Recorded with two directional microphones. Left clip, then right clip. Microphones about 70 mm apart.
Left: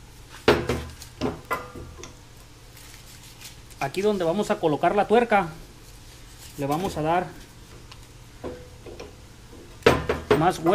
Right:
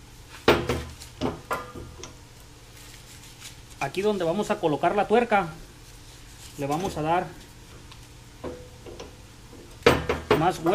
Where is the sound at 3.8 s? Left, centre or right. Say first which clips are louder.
Left 1 dB; left.